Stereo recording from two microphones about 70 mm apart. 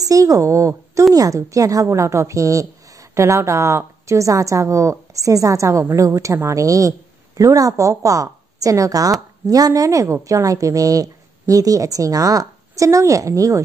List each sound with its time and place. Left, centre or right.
0.0 s a woman's voice: right